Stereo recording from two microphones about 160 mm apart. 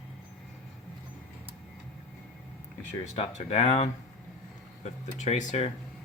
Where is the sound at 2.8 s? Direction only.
45° left (ahead or behind).